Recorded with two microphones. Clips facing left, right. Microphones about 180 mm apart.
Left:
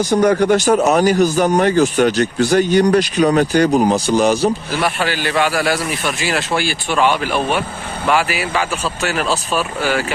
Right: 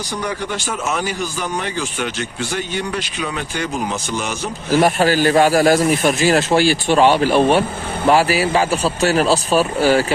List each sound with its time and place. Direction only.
0.1 s speech: 45° left (ahead or behind)
4.7 s speech: 40° right (ahead or behind)